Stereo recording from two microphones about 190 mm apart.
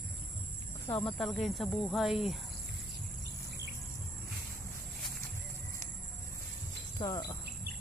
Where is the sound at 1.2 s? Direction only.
Centre (ahead or behind).